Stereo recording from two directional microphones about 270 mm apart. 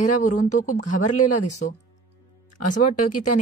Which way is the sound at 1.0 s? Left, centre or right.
Left.